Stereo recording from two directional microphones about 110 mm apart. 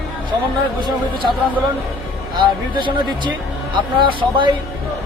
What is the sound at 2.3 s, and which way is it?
Speech, 45° right (ahead or behind).